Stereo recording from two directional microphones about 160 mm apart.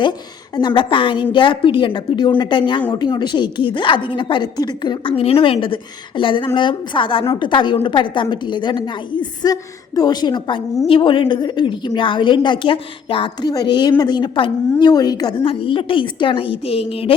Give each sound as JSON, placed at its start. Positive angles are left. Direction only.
{"t": 0.5, "sound": "a woman's voice", "side_deg": 30}